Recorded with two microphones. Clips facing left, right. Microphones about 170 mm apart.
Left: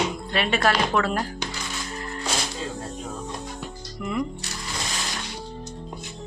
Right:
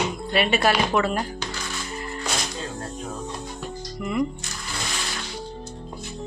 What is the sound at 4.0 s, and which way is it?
Speech, 5° right (ahead or behind).